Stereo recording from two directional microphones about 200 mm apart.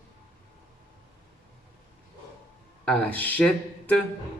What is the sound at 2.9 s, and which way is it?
Speech, 5° left (ahead or behind).